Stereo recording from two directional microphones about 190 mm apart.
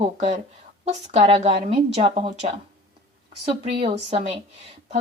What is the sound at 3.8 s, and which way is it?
Speech, 35° right (ahead or behind).